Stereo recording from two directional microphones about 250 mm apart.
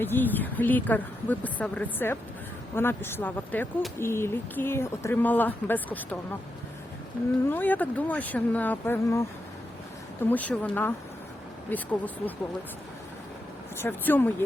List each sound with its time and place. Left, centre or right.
0.0 s speech: centre
7.5 s speech: centre
10.2 s speech: centre
13.7 s speech: centre